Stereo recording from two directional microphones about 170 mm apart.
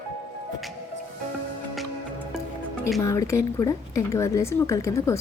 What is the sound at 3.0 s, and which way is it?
A woman's voice, 20° left (ahead or behind).